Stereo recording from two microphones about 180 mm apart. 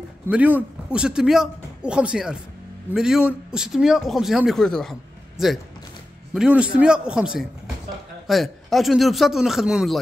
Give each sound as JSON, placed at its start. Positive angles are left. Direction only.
{"t": 0.3, "sound": "a man's voice", "side_deg": -10}